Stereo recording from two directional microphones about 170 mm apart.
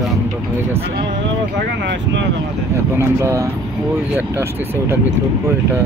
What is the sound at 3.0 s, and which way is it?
Speech, 15° right (ahead or behind).